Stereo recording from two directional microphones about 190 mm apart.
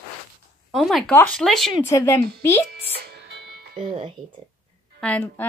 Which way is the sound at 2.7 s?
55° right (ahead or behind).